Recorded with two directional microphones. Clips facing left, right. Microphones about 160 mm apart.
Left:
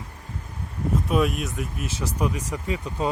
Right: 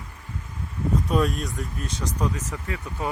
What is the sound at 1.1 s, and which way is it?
Speech, 5° left (ahead or behind).